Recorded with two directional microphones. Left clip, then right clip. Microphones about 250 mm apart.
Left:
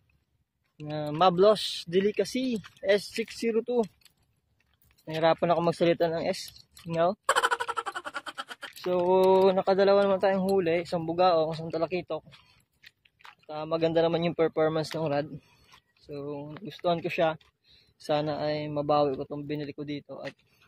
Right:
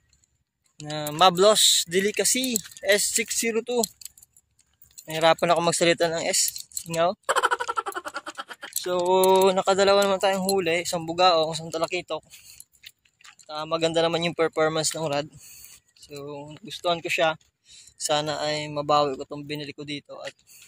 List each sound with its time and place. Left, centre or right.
0.9 s speech: centre
5.0 s speech: centre